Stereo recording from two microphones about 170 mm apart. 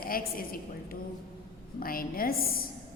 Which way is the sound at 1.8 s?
60° left (ahead or behind).